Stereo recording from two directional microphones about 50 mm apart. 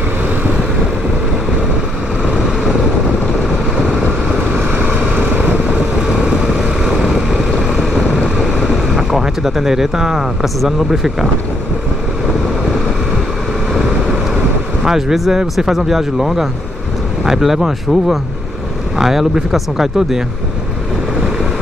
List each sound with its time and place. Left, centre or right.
2.3 s vehicle: centre
5.1 s vehicle: right
6.2 s vehicle: centre
8.6 s speech: centre
14.9 s speech: centre